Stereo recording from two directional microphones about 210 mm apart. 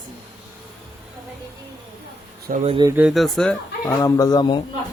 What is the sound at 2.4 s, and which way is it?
Speech, 35° right (ahead or behind).